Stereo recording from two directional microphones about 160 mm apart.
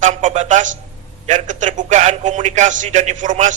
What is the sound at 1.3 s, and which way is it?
Speech, 50° right (ahead or behind).